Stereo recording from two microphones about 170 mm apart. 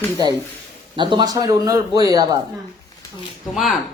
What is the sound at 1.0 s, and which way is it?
Speech, 25° right (ahead or behind).